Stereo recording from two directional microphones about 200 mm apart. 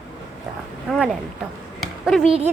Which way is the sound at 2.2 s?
30° right (ahead or behind).